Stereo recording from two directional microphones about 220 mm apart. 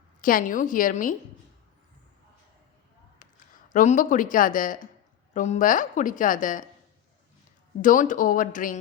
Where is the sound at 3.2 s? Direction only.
35° left (ahead or behind).